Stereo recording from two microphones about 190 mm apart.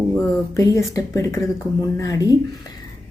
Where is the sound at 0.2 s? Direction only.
15° left (ahead or behind).